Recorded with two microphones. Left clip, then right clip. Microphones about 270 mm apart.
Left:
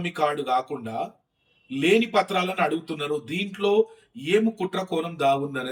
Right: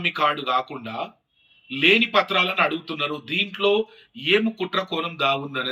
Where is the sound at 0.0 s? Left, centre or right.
Centre.